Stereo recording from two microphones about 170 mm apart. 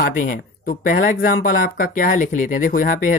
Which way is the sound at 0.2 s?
55° left (ahead or behind).